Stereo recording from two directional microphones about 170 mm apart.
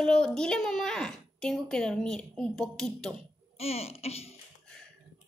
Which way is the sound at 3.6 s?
35° left (ahead or behind).